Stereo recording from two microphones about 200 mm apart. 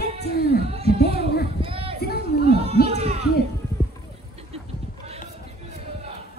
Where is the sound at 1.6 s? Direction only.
25° right (ahead or behind).